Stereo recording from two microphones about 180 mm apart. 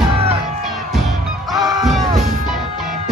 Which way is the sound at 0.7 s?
Centre (ahead or behind).